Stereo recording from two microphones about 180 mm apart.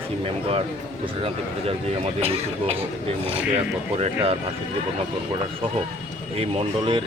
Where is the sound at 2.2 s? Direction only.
35° right (ahead or behind).